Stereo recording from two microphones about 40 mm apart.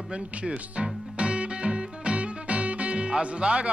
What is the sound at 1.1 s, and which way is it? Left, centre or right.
Music, right.